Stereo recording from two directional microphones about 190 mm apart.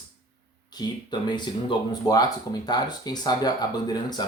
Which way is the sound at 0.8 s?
20° left (ahead or behind).